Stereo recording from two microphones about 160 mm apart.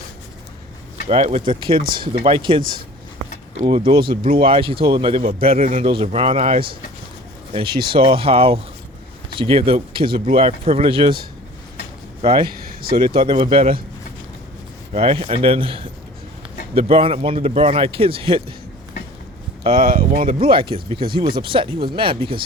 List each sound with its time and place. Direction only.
1.0 s speech: 40° right (ahead or behind)
3.7 s speech: 30° right (ahead or behind)
5.2 s a man's voice: 65° right (ahead or behind)
5.5 s speech: 35° right (ahead or behind)
7.9 s speech: 35° right (ahead or behind)
12.2 s speech: 30° right (ahead or behind)
12.5 s a sound: 65° right (ahead or behind)
13.0 s speech: 30° right (ahead or behind)
14.9 s speech: 35° right (ahead or behind)
19.8 s speech: 65° right (ahead or behind)
20.4 s speech: 35° right (ahead or behind)